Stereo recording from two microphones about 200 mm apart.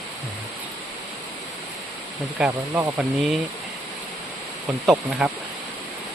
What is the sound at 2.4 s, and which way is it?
Speech, 5° right (ahead or behind).